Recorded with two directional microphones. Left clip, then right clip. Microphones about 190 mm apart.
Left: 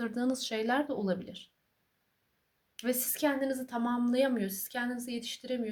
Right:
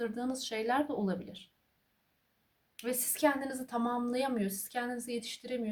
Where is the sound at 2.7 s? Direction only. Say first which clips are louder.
Left 3 dB; 30° left (ahead or behind).